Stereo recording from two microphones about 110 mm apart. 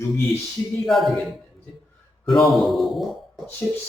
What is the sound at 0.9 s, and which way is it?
Speech, centre (ahead or behind).